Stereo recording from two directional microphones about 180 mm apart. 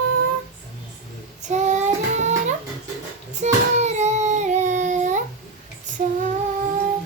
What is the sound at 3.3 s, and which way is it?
Child singing, 40° right (ahead or behind).